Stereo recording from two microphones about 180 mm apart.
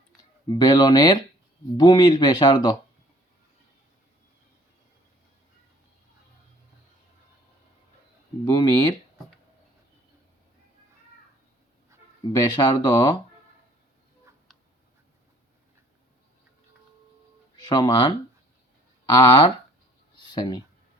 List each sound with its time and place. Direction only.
0.4 s speech: 25° left (ahead or behind)
8.4 s speech: 20° left (ahead or behind)
12.5 s speech: 25° left (ahead or behind)
17.7 s speech: 25° left (ahead or behind)
20.1 s a sound: 25° left (ahead or behind)